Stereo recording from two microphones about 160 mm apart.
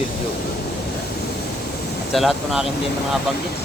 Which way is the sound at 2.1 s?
Centre (ahead or behind).